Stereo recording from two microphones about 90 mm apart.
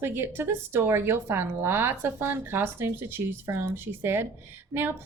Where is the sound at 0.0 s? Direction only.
25° right (ahead or behind).